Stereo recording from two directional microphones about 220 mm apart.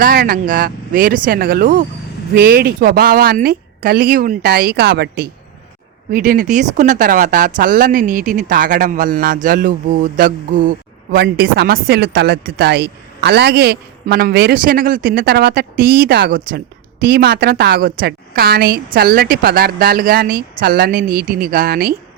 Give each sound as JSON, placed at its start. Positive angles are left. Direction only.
{"t": 0.0, "sound": "speech", "side_deg": -45}